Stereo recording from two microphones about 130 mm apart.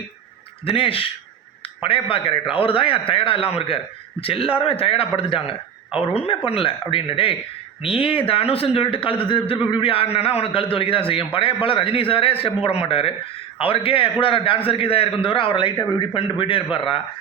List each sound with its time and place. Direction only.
0.6 s a man's voice: 45° left (ahead or behind)